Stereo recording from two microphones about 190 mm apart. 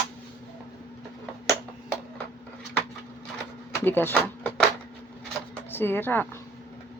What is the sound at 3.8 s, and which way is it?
Speech, 10° left (ahead or behind).